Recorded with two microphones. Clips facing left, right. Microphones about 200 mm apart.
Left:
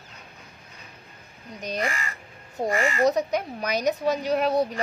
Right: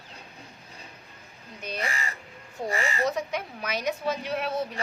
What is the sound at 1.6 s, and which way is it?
A woman's voice, 40° left (ahead or behind).